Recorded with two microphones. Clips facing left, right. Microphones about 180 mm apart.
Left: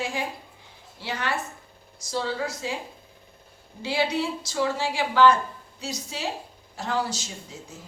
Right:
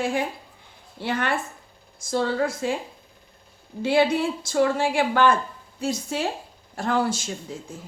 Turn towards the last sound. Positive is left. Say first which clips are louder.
# right 5 dB
turn(degrees=-55)  # may be behind; listen again after turning